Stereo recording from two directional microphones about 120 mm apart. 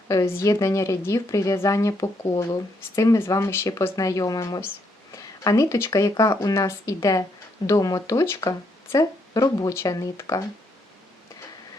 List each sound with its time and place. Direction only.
0.3 s speech: 25° left (ahead or behind)